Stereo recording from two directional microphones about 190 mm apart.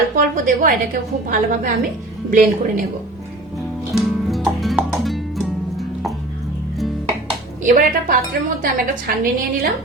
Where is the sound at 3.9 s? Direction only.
Centre (ahead or behind).